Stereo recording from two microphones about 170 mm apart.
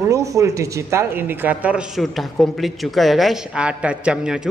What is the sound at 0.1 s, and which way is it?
Speech, 20° right (ahead or behind).